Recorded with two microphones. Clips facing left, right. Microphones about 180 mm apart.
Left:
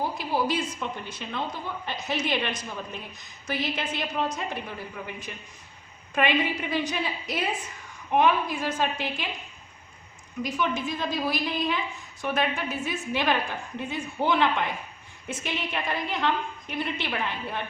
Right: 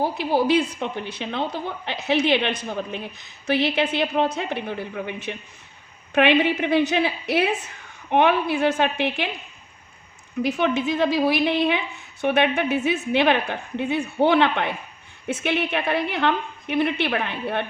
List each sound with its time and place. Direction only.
0.4 s a woman's voice: 65° right (ahead or behind)
10.4 s a woman's voice: 65° right (ahead or behind)